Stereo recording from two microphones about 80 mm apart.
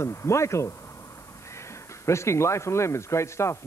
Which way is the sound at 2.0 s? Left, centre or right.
Left.